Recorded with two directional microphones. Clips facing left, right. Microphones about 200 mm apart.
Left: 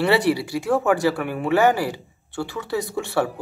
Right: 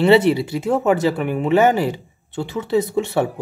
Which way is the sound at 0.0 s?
25° right (ahead or behind).